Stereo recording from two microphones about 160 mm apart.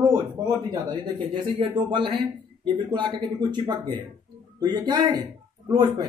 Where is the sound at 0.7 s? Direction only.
30° right (ahead or behind).